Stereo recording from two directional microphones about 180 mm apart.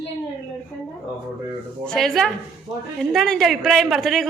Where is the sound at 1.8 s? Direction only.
5° left (ahead or behind).